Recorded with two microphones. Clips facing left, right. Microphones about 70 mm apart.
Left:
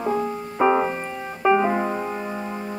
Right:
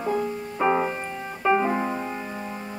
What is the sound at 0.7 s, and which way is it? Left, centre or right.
Piano, centre.